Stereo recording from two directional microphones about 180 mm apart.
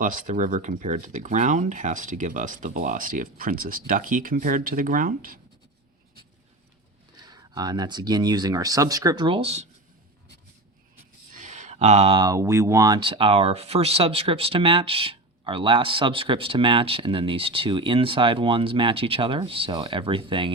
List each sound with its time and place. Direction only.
0.0 s speech: 45° right (ahead or behind)
7.3 s speech: 20° right (ahead or behind)
11.3 s speech: 45° right (ahead or behind)